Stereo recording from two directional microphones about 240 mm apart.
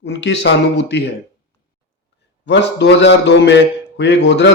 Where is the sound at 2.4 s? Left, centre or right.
Left.